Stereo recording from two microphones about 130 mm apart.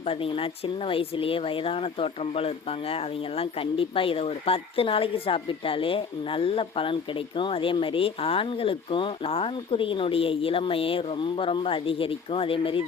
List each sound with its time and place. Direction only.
0.0 s speech: 45° left (ahead or behind)